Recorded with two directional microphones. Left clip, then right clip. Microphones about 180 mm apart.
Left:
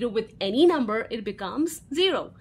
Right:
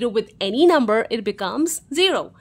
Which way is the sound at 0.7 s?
40° right (ahead or behind).